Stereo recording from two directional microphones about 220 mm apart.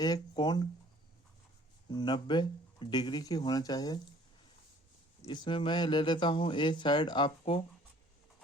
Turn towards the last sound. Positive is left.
turn(degrees=25)  # may be behind; listen again after turning